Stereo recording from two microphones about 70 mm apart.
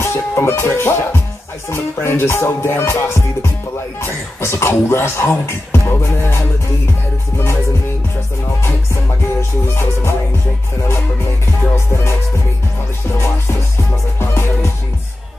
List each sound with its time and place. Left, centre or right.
0.0 s music: left
1.7 s speech: left
4.0 s speech: left
9.4 s speech: left
11.7 s speech: left
14.2 s speech: left